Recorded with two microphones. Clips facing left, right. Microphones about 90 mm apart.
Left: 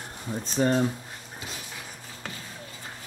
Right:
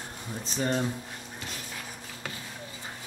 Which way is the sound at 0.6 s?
35° left (ahead or behind).